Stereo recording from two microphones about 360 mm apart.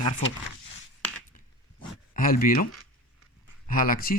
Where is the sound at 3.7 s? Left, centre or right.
Left.